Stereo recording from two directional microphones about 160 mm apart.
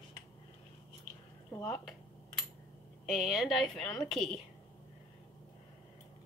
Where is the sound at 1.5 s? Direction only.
10° left (ahead or behind).